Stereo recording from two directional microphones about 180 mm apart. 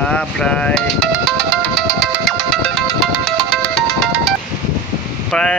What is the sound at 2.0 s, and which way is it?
Music, centre (ahead or behind).